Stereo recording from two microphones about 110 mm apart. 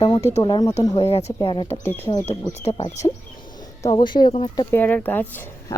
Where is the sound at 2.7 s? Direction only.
80° left.